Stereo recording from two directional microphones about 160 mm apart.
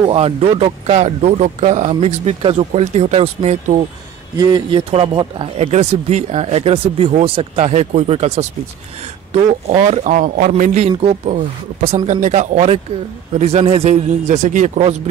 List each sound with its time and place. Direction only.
0.1 s speech: 40° right (ahead or behind)
4.4 s speech: 25° right (ahead or behind)
5.6 s a man's voice: 40° right (ahead or behind)